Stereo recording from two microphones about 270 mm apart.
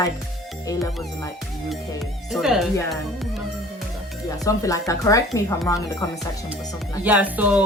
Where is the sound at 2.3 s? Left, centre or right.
Centre.